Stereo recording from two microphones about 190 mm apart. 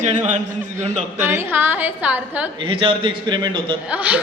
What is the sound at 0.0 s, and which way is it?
Speech, 40° right (ahead or behind).